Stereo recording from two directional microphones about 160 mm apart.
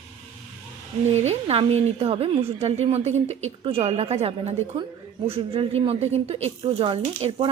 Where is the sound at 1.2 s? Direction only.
40° right (ahead or behind).